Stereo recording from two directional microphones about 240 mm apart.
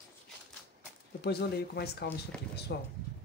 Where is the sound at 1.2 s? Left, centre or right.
Left.